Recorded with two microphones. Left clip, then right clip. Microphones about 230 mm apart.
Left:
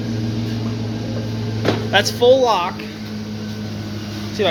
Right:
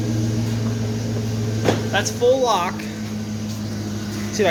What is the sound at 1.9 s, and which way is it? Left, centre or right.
Speech, left.